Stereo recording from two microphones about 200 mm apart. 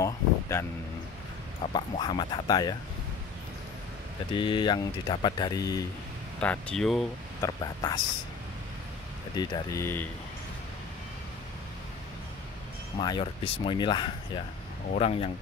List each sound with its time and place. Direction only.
0.0 s a sound: 15° left (ahead or behind)
1.7 s speech: 25° left (ahead or behind)
4.3 s speech: 25° left (ahead or behind)
6.4 s speech: 5° left (ahead or behind)
7.4 s speech: 20° left (ahead or behind)
9.4 s speech: 20° left (ahead or behind)
13.0 s speech: 25° left (ahead or behind)